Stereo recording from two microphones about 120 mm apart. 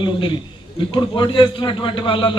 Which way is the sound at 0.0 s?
40° left (ahead or behind).